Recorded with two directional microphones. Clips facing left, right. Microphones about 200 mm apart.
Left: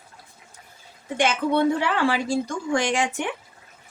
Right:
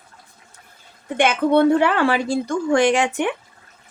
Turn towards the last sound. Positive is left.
turn(degrees=-65)  # may be behind; listen again after turning